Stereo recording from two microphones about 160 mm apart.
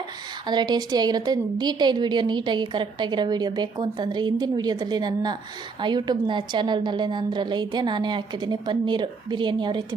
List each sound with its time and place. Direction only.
0.4 s a woman's voice: 25° right (ahead or behind)